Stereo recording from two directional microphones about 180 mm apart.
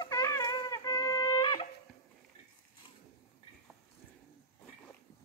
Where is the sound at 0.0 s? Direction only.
15° left (ahead or behind).